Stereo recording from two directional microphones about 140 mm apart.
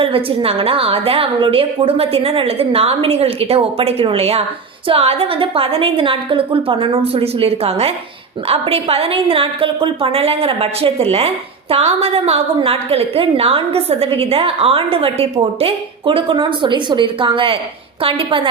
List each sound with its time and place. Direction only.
0.0 s a woman's voice: 40° right (ahead or behind)